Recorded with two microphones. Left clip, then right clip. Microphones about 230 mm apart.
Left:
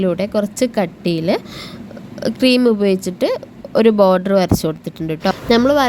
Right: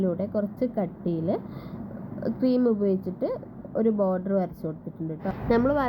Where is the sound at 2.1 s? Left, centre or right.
Left.